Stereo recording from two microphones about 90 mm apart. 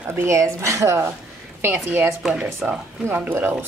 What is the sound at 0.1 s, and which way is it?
A woman's voice, 30° right (ahead or behind).